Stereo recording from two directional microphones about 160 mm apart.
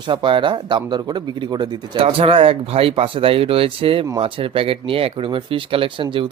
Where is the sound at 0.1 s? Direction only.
30° right (ahead or behind).